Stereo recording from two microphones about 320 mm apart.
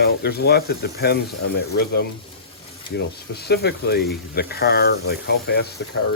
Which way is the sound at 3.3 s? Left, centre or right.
Left.